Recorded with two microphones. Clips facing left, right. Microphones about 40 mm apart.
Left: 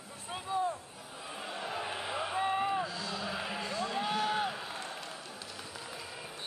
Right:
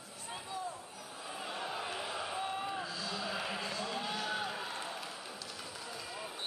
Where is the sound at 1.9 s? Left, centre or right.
Centre.